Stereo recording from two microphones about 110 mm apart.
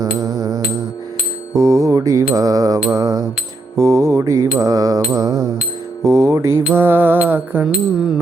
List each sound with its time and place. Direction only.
0.0 s music: 35° right (ahead or behind)
1.5 s mantra: 30° right (ahead or behind)